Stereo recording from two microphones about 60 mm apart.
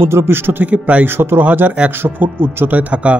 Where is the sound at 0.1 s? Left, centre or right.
Right.